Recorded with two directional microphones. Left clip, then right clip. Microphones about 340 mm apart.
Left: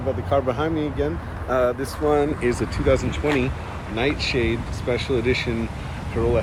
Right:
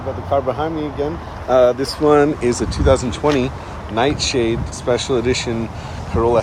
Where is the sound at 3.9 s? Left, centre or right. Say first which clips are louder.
Right 6 dB; centre.